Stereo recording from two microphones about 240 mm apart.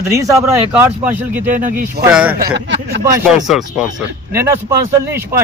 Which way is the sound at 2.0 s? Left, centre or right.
Centre.